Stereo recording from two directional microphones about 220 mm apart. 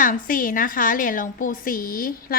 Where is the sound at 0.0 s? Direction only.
40° left (ahead or behind).